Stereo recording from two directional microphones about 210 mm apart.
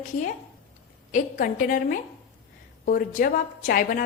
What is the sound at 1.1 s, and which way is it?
A woman's voice, 40° left (ahead or behind).